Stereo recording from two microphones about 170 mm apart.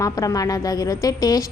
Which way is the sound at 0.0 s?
20° left (ahead or behind).